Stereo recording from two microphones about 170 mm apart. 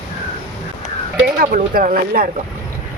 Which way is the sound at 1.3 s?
50° right (ahead or behind).